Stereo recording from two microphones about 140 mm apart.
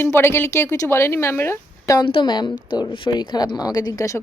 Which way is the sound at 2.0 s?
35° left (ahead or behind).